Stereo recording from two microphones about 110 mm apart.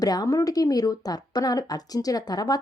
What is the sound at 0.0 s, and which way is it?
Speech, 35° left (ahead or behind).